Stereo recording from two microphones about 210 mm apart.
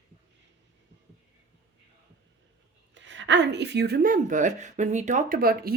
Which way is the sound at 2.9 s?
60° right (ahead or behind).